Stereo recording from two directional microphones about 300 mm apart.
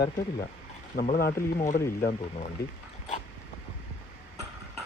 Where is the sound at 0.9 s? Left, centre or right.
Left.